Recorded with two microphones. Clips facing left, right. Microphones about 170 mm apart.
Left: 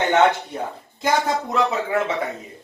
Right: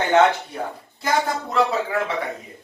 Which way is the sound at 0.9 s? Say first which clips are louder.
Left 2 dB; 20° left (ahead or behind).